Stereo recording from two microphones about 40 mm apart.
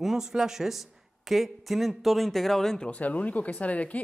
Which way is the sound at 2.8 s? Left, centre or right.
Left.